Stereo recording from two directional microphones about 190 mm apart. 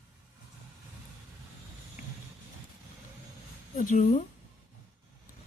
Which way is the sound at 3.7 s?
40° left (ahead or behind).